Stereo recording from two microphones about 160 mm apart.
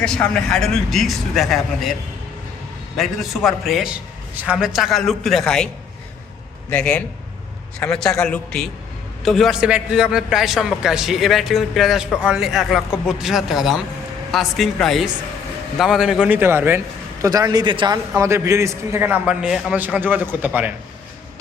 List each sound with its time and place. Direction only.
0.0 s a man's voice: 5° left (ahead or behind)
3.0 s a man's voice: centre (ahead or behind)
6.7 s a man's voice: 10° left (ahead or behind); by 18.0 s 30° right (ahead or behind)
18.2 s a man's voice: 15° right (ahead or behind)